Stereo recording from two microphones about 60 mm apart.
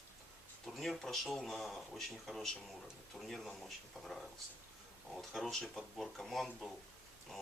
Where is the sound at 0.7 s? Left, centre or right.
Centre.